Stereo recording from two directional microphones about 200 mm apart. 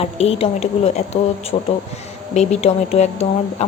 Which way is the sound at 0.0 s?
30° left (ahead or behind).